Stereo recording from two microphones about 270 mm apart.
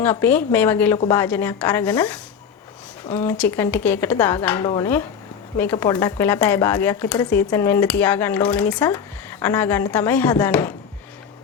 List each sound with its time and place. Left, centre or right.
0.0 s a woman's voice: centre
4.6 s speech: centre
5.5 s speech: centre